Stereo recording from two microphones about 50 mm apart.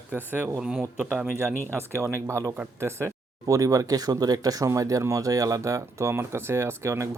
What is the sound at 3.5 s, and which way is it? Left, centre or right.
Speech, right.